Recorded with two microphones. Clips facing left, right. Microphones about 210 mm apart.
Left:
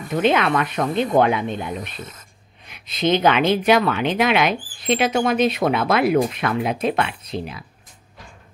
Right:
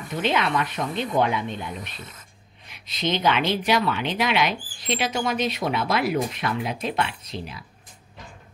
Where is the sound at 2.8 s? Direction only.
55° left (ahead or behind).